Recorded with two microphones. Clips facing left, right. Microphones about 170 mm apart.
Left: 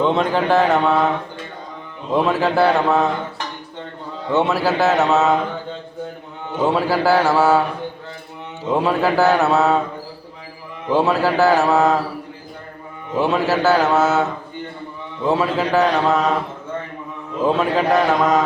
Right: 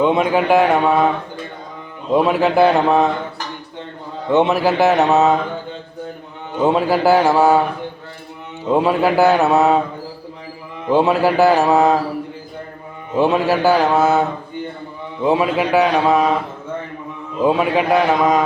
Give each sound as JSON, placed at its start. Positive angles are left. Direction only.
{"t": 0.0, "sound": "mantra", "side_deg": -10}
{"t": 2.1, "sound": "mantra", "side_deg": -15}
{"t": 4.3, "sound": "mantra", "side_deg": -20}
{"t": 6.7, "sound": "mantra", "side_deg": -15}
{"t": 8.7, "sound": "mantra", "side_deg": -15}
{"t": 10.9, "sound": "mantra", "side_deg": -15}
{"t": 13.1, "sound": "mantra", "side_deg": -15}
{"t": 15.3, "sound": "mantra", "side_deg": -15}
{"t": 17.4, "sound": "mantra", "side_deg": -10}